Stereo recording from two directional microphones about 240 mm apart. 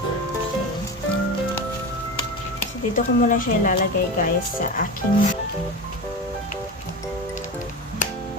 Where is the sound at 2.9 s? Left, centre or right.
Left.